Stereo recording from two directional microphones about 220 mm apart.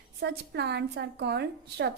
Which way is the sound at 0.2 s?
50° right (ahead or behind).